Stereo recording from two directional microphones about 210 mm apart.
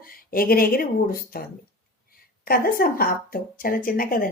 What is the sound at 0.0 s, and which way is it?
A woman's voice, 45° left (ahead or behind).